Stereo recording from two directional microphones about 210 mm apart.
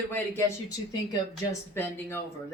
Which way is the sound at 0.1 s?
10° left (ahead or behind).